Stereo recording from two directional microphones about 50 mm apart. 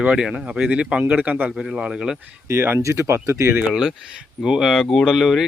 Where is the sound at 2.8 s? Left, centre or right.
Right.